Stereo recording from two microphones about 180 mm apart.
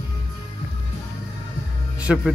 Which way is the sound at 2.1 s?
5° right (ahead or behind).